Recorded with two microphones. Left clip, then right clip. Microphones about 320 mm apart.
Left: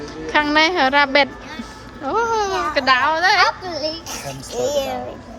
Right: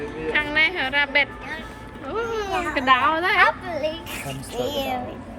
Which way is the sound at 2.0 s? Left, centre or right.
Centre.